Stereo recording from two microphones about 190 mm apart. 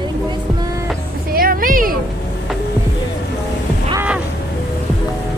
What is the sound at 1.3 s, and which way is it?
Music, 50° right (ahead or behind).